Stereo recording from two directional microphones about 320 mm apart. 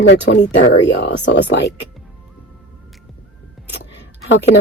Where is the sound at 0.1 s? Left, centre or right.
Left.